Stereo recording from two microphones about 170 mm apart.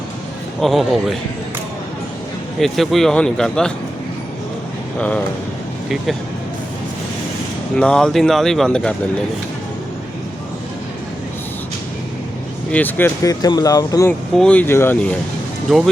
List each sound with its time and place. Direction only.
0.6 s speech: centre (ahead or behind)
2.6 s speech: centre (ahead or behind)
4.9 s speech: 10° left (ahead or behind)
7.8 s speech: 5° left (ahead or behind)
12.7 s speech: 10° left (ahead or behind)
14.1 s speech: 5° left (ahead or behind)
15.7 s speech: centre (ahead or behind)